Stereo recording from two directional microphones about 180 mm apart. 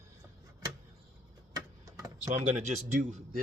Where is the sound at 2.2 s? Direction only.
35° right (ahead or behind).